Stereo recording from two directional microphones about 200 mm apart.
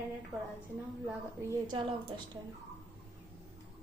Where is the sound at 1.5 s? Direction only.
20° right (ahead or behind).